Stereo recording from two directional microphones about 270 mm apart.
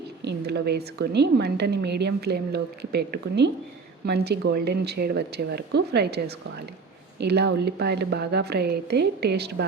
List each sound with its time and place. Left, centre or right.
0.2 s a woman's voice: right